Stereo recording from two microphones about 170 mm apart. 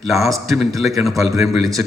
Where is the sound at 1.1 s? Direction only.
20° right (ahead or behind).